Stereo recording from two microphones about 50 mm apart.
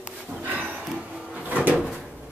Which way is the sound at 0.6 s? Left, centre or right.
Right.